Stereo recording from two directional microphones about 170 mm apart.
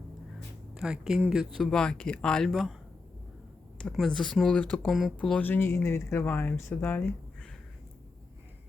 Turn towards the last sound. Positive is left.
turn(degrees=10)  # may be behind; listen again after turning